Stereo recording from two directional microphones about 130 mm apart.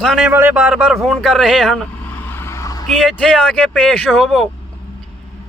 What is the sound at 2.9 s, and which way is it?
Speech, centre (ahead or behind).